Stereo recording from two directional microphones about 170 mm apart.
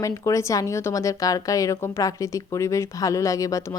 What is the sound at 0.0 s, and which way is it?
A woman's voice, 20° left (ahead or behind).